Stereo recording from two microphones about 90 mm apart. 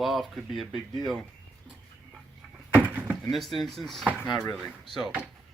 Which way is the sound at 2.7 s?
20° right (ahead or behind).